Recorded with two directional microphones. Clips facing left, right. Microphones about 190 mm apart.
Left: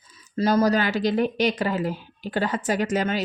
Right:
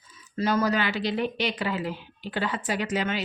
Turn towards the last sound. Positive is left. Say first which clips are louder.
# left 4 dB
turn(degrees=45)  # may be behind; listen again after turning